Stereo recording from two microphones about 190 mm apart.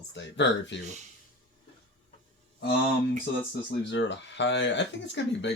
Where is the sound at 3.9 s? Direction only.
70° left (ahead or behind).